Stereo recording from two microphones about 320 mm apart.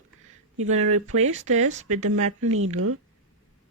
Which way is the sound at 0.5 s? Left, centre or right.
Right.